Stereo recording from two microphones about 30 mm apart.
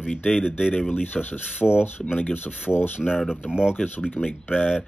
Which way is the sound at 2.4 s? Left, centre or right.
Left.